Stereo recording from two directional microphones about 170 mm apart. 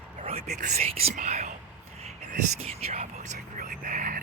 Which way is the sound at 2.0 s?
45° right (ahead or behind).